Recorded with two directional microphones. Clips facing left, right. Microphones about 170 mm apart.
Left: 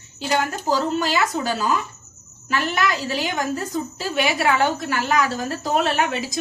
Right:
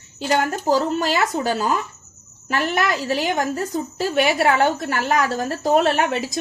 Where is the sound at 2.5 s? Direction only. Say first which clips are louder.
Right 1 dB; 50° right (ahead or behind).